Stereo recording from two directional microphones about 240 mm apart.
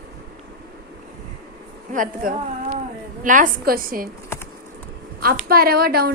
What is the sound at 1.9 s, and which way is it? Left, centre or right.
A woman's voice, right.